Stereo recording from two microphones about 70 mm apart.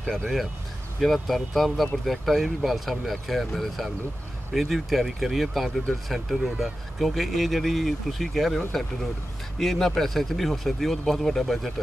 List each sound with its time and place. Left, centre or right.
0.0 s speech: centre